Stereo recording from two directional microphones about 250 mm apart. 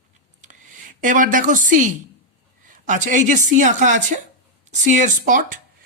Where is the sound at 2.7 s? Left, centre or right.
Right.